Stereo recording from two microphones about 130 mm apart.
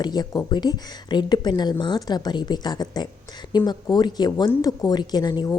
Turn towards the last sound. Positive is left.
turn(degrees=30)  # may be behind; listen again after turning